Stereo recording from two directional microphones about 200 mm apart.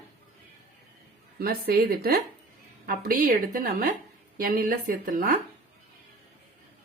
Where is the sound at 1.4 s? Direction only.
50° right (ahead or behind).